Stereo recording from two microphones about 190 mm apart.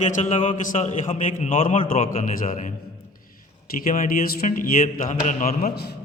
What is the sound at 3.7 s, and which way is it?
A man's voice, 40° left (ahead or behind).